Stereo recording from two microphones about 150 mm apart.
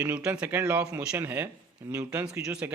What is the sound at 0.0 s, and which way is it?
Speech, 10° right (ahead or behind).